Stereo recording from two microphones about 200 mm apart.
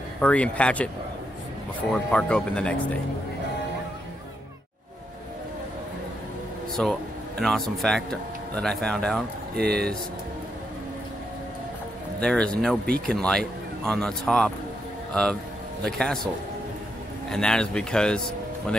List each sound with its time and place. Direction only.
0.2 s speech: 5° left (ahead or behind)
6.8 s speech: 5° left (ahead or behind)
9.6 s speech: 50° right (ahead or behind)
12.2 s speech: 5° left (ahead or behind)
15.8 s speech: 5° left (ahead or behind)
17.3 s speech: 5° left (ahead or behind)